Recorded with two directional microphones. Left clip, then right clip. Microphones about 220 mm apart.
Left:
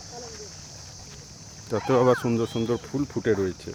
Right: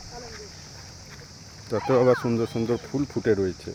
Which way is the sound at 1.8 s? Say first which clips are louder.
Right 1 dB; 5° left (ahead or behind).